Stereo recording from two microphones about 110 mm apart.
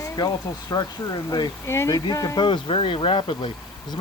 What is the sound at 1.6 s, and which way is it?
Speech, 25° left (ahead or behind).